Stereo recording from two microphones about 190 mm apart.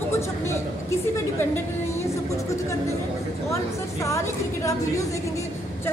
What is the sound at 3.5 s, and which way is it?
A woman's voice, 15° left (ahead or behind).